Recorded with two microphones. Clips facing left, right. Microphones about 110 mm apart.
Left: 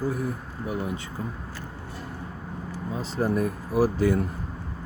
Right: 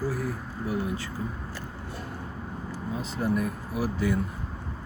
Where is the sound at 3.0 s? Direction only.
40° left (ahead or behind).